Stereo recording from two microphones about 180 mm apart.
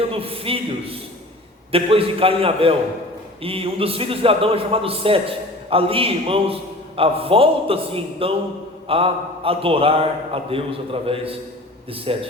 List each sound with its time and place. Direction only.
0.0 s a man's voice: 30° right (ahead or behind)